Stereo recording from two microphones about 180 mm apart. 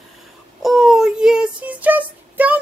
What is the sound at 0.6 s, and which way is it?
Child singing, centre (ahead or behind).